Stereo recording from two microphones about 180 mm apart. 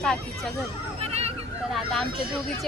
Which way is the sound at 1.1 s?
35° right (ahead or behind).